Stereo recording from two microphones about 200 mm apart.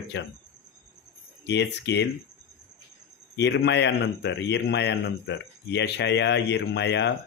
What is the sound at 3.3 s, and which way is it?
A man's voice, 60° left (ahead or behind).